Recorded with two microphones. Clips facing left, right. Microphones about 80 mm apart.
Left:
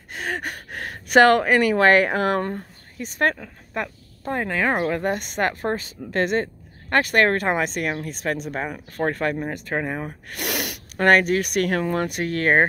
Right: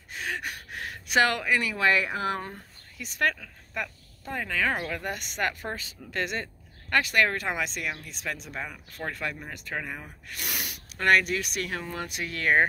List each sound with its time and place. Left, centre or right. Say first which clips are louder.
0.1 s speech: left 5 dB; left
10.0 s gasp: left 9 dB; left
11.0 s speech: left 6 dB; left